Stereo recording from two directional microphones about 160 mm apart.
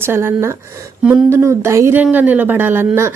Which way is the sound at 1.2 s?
15° right (ahead or behind).